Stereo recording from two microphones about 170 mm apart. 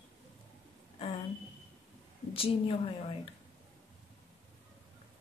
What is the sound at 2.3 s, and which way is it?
Speech, 35° left (ahead or behind).